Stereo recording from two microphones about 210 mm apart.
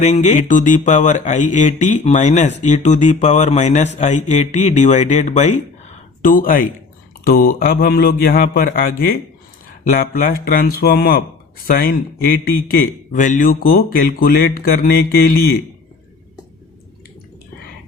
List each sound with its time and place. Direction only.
0.0 s a man's voice: 30° left (ahead or behind)